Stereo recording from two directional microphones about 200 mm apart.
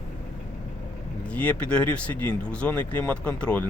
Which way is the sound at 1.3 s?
5° left (ahead or behind).